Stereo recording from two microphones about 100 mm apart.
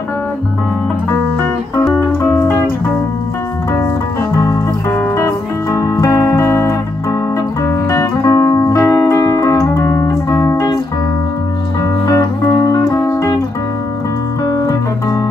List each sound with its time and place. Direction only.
2.0 s music: 20° left (ahead or behind)
4.4 s music: 30° left (ahead or behind)
12.1 s music: 35° left (ahead or behind)